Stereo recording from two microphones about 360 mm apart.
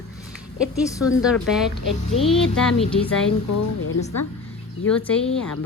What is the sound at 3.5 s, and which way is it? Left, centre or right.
Speech, left.